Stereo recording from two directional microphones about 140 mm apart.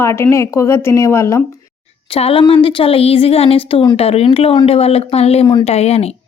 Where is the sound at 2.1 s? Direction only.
40° left (ahead or behind).